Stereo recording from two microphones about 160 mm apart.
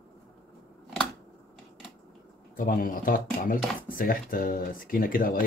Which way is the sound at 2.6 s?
60° left (ahead or behind).